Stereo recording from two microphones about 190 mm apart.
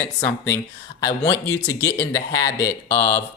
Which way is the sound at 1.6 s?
15° left (ahead or behind).